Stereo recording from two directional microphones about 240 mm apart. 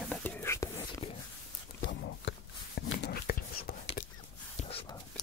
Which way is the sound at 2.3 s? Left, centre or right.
Left.